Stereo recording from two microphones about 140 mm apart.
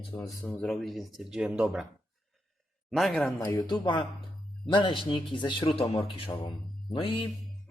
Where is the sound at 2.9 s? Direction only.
Centre (ahead or behind).